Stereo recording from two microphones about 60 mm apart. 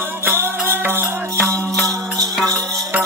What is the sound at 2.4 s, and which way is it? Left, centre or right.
Music, centre.